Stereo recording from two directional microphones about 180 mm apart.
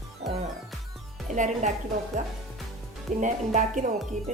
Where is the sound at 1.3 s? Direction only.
45° right (ahead or behind).